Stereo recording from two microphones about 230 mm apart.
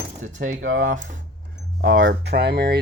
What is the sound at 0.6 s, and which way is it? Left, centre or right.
Speech, right.